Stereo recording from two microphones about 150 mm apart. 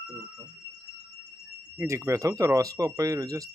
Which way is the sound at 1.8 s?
20° right (ahead or behind).